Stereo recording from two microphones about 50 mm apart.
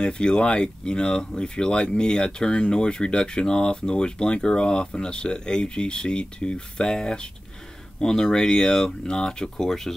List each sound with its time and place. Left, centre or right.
0.0 s speech: centre